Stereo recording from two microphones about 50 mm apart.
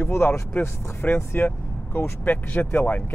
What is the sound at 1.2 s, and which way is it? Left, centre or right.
Speech, left.